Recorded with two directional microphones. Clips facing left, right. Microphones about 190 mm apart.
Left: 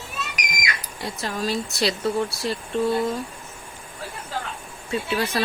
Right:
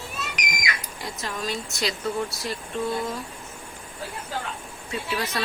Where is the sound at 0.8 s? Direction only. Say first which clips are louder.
Left 3 dB; 35° left (ahead or behind).